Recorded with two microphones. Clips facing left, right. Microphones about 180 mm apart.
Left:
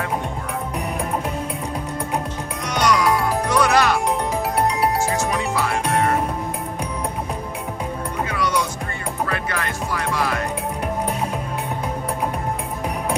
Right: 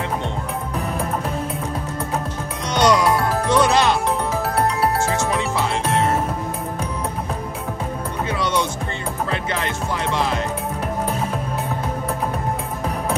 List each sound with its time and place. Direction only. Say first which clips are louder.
2.7 s music: right 2 dB; 25° right (ahead or behind)
5.3 s music: right 1 dB; 25° right (ahead or behind)
8.3 s music: right 2 dB; 25° right (ahead or behind)